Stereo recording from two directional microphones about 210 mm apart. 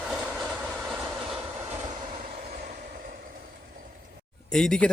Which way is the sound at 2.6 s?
40° right (ahead or behind).